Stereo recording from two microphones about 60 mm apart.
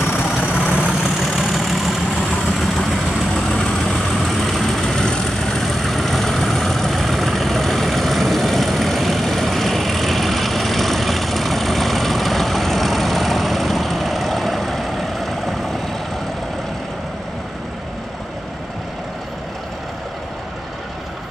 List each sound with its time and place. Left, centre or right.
0.4 s vehicle: left
0.8 s vehicle: centre
3.3 s vehicle: centre